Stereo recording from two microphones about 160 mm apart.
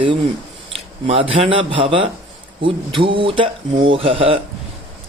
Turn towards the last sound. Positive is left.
turn(degrees=-35)  # may be behind; listen again after turning